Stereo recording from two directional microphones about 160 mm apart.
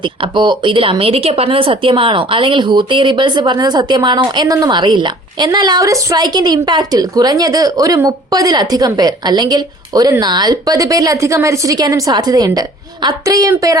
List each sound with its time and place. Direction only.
0.0 s a woman's voice: 30° right (ahead or behind)